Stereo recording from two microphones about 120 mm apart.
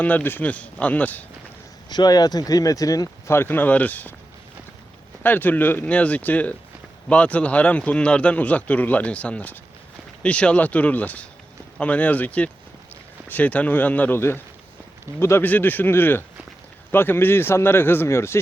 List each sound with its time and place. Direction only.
0.0 s a man's voice: 15° left (ahead or behind)
1.9 s speech: 35° left (ahead or behind); by 4.1 s 15° left (ahead or behind)
5.2 s a man's voice: 15° left (ahead or behind)